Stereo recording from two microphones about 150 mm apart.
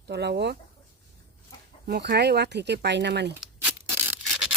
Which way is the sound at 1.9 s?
90° right.